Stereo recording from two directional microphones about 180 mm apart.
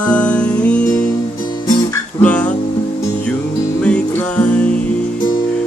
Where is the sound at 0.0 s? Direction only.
5° left (ahead or behind).